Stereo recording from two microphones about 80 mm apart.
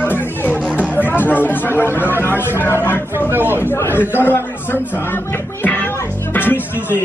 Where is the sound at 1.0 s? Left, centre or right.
Left.